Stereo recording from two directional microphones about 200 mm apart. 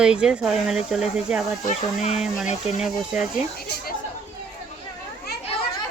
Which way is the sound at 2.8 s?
Centre (ahead or behind).